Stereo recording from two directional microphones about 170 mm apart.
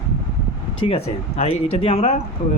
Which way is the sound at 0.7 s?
35° left (ahead or behind).